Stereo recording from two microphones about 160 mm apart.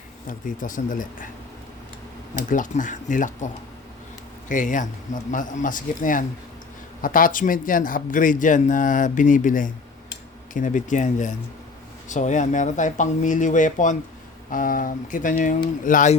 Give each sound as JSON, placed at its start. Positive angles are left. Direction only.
{"t": 0.3, "sound": "speech", "side_deg": 55}
{"t": 2.5, "sound": "speech", "side_deg": 55}